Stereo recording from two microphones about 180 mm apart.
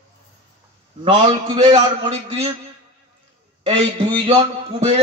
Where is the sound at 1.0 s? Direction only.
25° right (ahead or behind).